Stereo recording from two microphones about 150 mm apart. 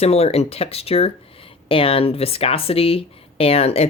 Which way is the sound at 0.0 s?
45° left (ahead or behind).